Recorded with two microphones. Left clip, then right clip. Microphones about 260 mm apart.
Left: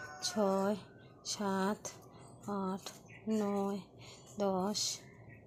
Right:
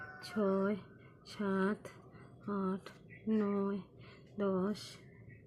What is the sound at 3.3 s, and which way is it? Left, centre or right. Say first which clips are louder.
Speech: even; left.